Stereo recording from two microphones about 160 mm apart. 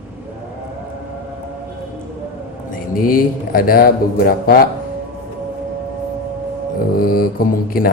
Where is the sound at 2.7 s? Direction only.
60° left (ahead or behind).